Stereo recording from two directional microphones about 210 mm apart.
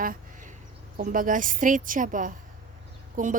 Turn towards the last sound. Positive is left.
turn(degrees=-40)  # may be behind; listen again after turning